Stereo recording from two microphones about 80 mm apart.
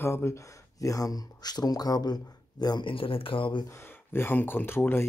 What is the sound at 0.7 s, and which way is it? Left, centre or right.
Speech, left.